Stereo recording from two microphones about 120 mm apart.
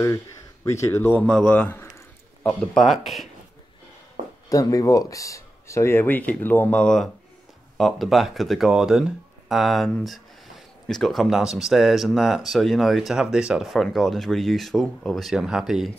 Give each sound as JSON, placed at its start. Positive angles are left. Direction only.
{"t": 0.7, "sound": "speech", "side_deg": 25}
{"t": 1.2, "sound": "a man's voice", "side_deg": 5}
{"t": 4.5, "sound": "speech", "side_deg": 30}